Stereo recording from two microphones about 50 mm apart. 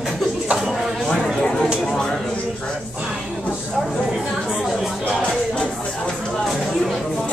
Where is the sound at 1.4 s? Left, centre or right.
Centre.